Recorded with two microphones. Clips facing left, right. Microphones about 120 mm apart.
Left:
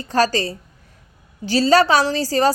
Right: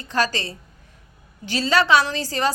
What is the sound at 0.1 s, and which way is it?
A woman's voice, 35° left (ahead or behind).